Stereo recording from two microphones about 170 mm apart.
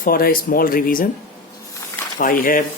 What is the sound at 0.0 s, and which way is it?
Speech, 60° left (ahead or behind).